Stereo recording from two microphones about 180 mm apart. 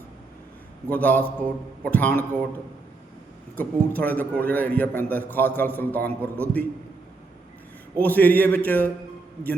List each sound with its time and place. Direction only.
0.9 s a man's voice: 10° left (ahead or behind)
3.5 s a man's voice: 10° left (ahead or behind)
7.9 s a man's voice: 10° left (ahead or behind)